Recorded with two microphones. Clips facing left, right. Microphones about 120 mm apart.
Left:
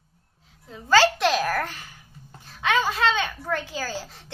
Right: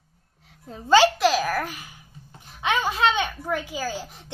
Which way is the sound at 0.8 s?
20° right (ahead or behind).